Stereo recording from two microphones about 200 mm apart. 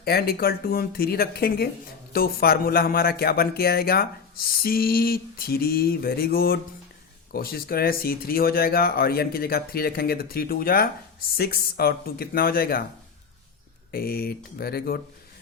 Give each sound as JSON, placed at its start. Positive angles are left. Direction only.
{"t": 0.0, "sound": "a man's voice", "side_deg": 50}
{"t": 13.9, "sound": "a man's voice", "side_deg": 50}